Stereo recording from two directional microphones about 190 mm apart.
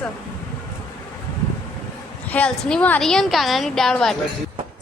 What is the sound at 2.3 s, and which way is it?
A woman's voice, 5° left (ahead or behind).